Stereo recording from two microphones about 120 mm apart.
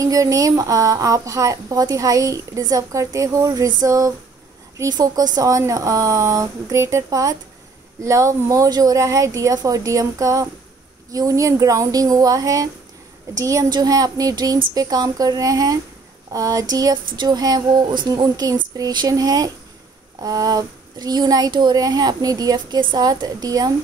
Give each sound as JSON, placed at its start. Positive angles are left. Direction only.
{"t": 0.0, "sound": "a woman's voice", "side_deg": -30}